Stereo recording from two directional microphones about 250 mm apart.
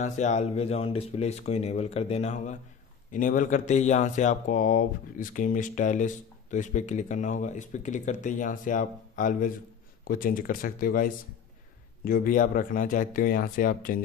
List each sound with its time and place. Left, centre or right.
0.0 s speech: left